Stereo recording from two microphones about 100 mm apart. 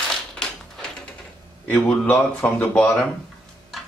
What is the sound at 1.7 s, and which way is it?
Speech, 15° left (ahead or behind).